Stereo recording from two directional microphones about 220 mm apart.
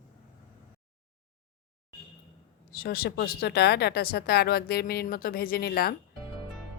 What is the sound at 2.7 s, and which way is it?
Speech, 45° left (ahead or behind).